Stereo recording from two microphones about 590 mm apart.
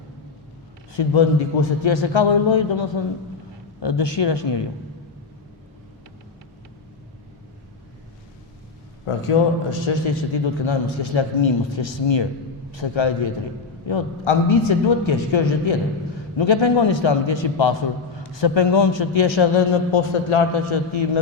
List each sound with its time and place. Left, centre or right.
0.9 s a man's voice: left
9.0 s a man's voice: left